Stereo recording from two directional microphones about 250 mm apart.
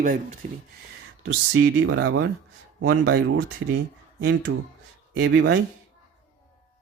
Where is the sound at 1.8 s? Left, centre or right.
Right.